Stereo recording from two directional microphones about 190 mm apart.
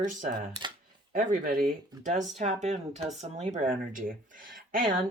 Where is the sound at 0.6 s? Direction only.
25° right (ahead or behind).